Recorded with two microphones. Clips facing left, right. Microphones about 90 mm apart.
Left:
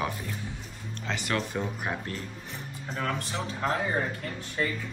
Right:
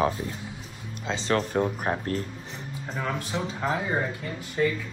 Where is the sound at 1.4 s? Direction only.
45° right (ahead or behind).